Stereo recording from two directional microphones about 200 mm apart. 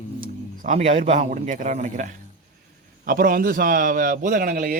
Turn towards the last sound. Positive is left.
turn(degrees=-45)  # may be behind; listen again after turning